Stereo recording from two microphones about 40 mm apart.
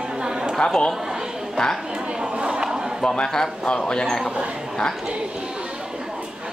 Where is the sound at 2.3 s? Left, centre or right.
Right.